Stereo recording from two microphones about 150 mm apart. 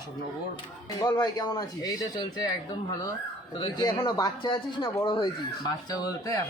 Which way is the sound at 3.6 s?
30° left (ahead or behind).